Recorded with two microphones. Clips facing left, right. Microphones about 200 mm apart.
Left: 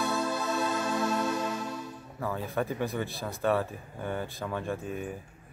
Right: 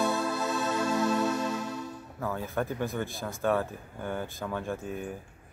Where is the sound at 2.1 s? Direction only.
Centre (ahead or behind).